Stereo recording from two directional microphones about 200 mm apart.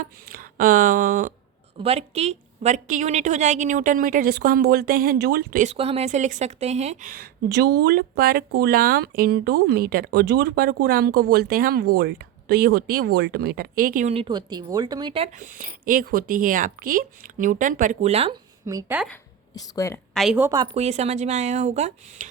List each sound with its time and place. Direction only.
0.0 s speech: 45° right (ahead or behind)
1.8 s speech: 30° right (ahead or behind); by 5.7 s 45° right (ahead or behind)
5.7 s a woman's voice: 30° right (ahead or behind)
14.1 s speech: 25° right (ahead or behind)
18.6 s a woman's voice: 15° right (ahead or behind)
19.5 s a woman's voice: 15° left (ahead or behind)
20.1 s a woman's voice: 5° right (ahead or behind)
20.7 s speech: 30° right (ahead or behind)